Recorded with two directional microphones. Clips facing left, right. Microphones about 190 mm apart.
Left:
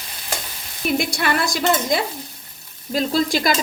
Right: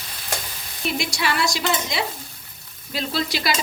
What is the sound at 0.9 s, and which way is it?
A woman's voice, 50° left (ahead or behind).